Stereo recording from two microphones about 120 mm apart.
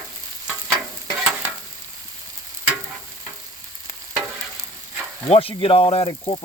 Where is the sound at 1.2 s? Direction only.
5° right (ahead or behind).